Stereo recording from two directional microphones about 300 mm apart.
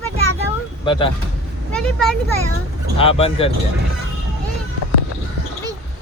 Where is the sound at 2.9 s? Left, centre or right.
Centre.